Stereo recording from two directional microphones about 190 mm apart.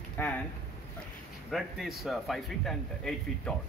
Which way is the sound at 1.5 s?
Centre (ahead or behind).